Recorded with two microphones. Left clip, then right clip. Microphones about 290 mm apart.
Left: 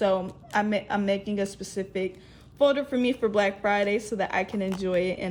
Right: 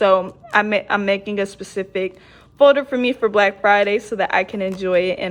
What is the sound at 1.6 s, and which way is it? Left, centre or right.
Speech, right.